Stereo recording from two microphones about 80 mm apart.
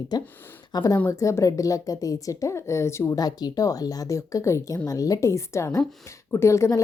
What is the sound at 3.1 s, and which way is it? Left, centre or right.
A woman's voice, left.